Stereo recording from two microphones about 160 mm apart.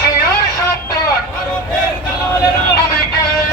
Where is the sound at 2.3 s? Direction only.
25° left (ahead or behind).